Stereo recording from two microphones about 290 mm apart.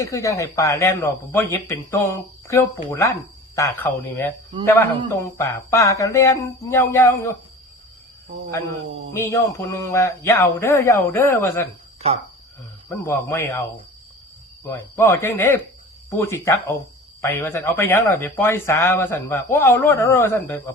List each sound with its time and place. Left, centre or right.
0.0 s speech: centre
9.1 s speech: centre
11.9 s speech: right
12.9 s speech: centre
14.7 s speech: centre